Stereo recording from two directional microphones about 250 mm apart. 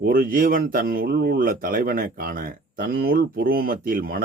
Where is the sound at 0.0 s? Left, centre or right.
Right.